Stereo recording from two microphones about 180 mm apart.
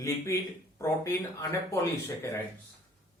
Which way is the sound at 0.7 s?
15° left (ahead or behind).